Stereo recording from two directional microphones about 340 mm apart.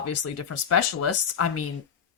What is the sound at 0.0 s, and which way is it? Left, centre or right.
Speech, left.